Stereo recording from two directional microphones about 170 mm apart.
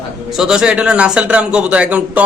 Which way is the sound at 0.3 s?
5° right (ahead or behind).